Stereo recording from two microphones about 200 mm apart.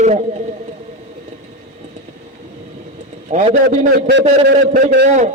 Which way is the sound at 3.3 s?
40° right (ahead or behind).